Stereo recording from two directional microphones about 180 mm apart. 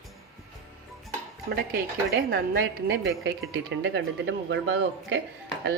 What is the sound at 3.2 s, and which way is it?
Speech, 90° right.